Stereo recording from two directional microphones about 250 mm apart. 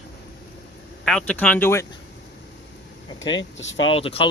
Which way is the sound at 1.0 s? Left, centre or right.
Centre.